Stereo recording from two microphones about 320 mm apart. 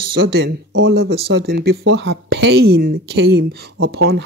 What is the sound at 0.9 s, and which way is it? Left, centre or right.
Speech, right.